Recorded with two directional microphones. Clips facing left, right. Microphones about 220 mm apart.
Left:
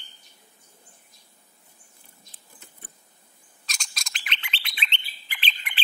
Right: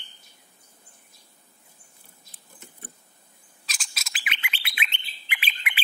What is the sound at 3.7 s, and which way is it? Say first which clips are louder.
Bird: even; 5° right (ahead or behind).